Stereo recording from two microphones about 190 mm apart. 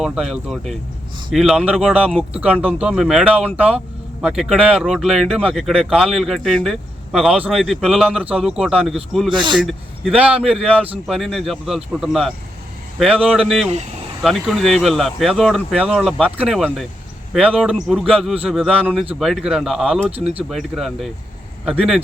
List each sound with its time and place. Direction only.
0.0 s speech: 5° right (ahead or behind)
9.3 s speech: 25° right (ahead or behind)
9.6 s speech: 5° right (ahead or behind)
20.1 s speech: 30° right (ahead or behind)
20.5 s speech: centre (ahead or behind)